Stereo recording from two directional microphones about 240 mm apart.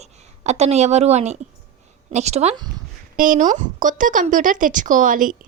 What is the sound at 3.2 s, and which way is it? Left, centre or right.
Speech, right.